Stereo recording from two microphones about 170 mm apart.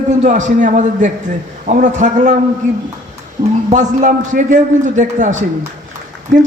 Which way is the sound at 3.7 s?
45° right (ahead or behind).